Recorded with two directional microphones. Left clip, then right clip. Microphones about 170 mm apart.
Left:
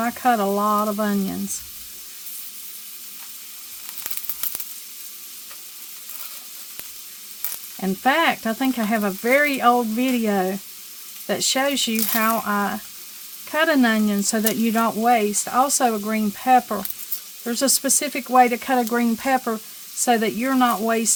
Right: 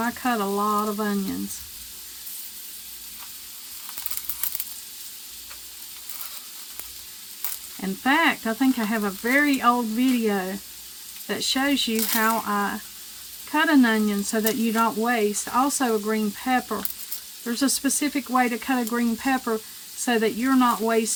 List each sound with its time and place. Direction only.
0.0 s frying: 75° left (ahead or behind)
7.8 s frying: 85° left; by 10.5 s 65° left (ahead or behind)
11.3 s speech: 85° left
15.5 s speech: 85° left
17.4 s frying: 70° left (ahead or behind)
20.1 s speech: 80° left